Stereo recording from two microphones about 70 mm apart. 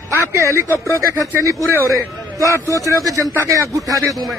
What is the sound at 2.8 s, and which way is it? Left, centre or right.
A man's voice, right.